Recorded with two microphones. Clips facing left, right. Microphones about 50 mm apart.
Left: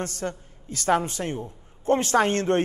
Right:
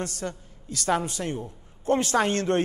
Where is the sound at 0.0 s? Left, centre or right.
Left.